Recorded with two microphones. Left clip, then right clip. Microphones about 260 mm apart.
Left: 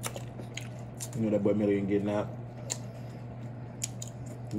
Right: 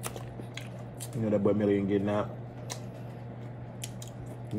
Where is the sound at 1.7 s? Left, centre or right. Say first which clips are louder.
Right 1 dB; right.